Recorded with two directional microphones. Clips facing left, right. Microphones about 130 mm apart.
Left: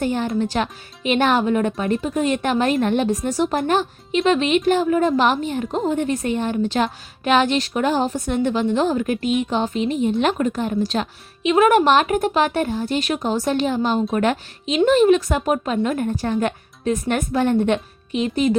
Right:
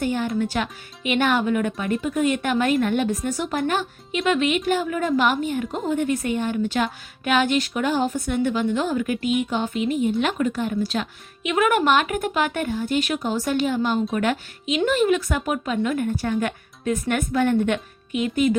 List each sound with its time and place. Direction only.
0.0 s a woman's voice: 35° left (ahead or behind)
11.4 s a woman's voice: 30° left (ahead or behind)
13.8 s a woman's voice: 25° left (ahead or behind)
14.2 s a woman's voice: 35° left (ahead or behind)